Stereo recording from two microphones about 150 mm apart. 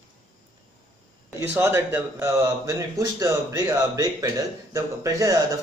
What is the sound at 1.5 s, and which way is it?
Speech, 15° right (ahead or behind).